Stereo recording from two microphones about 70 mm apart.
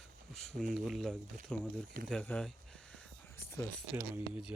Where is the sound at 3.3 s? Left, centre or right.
Left.